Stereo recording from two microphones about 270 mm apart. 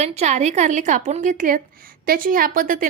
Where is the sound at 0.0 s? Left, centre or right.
Right.